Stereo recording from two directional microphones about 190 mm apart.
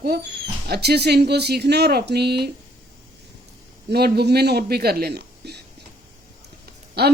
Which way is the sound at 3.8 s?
55° right (ahead or behind).